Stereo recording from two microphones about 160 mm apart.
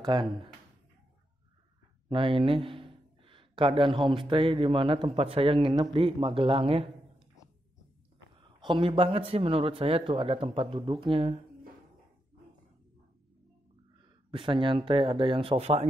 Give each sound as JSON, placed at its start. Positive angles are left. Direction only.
{"t": 0.0, "sound": "speech", "side_deg": -30}
{"t": 2.0, "sound": "speech", "side_deg": -35}
{"t": 8.4, "sound": "a man's voice", "side_deg": -30}
{"t": 14.3, "sound": "a man's voice", "side_deg": -30}